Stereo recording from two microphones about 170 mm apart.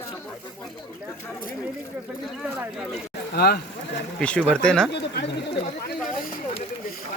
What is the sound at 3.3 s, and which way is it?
Speech, 70° left (ahead or behind).